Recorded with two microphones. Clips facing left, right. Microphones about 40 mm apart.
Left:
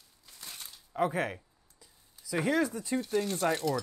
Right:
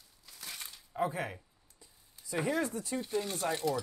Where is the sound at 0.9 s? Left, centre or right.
Left.